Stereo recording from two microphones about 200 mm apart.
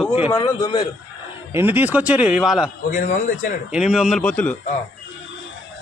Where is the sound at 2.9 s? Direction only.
45° left (ahead or behind).